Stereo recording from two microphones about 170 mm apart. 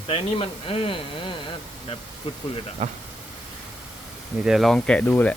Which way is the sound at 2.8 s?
40° right (ahead or behind).